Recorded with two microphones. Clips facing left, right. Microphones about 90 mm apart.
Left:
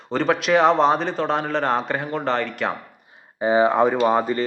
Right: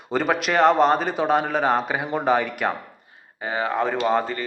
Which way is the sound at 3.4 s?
20° left (ahead or behind).